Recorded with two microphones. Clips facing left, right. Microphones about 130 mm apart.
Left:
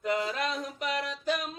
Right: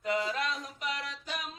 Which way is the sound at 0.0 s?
50° left (ahead or behind).